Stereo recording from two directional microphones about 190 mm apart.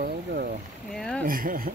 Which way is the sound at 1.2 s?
50° right (ahead or behind).